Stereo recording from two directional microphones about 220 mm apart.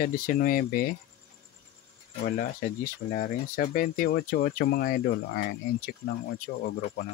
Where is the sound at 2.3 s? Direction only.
40° left (ahead or behind).